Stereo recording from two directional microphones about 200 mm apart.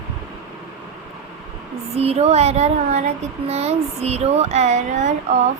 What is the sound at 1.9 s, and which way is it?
Speech, 30° right (ahead or behind).